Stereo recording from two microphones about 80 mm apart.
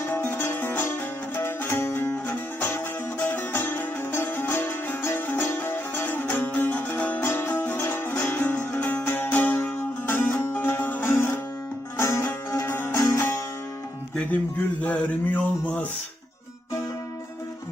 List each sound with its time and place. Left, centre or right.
0.1 s music: left
13.0 s music: left
14.8 s a sound: centre